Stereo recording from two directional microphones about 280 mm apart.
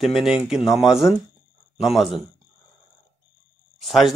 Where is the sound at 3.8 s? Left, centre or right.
Centre.